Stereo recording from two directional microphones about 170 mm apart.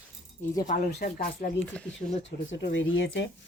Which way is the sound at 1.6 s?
5° left (ahead or behind).